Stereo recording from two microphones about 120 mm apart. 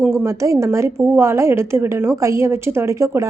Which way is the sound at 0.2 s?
25° right (ahead or behind).